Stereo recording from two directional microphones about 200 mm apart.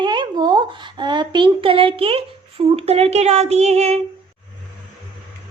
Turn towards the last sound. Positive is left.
turn(degrees=-35)  # may be behind; listen again after turning